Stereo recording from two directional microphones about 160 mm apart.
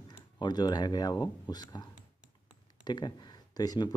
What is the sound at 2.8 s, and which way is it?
Speech, 25° left (ahead or behind).